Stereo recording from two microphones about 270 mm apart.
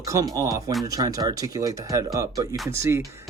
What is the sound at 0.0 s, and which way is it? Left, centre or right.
Speech, centre.